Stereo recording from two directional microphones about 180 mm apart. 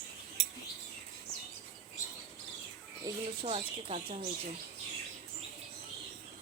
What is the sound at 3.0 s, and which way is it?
Speech, 30° right (ahead or behind).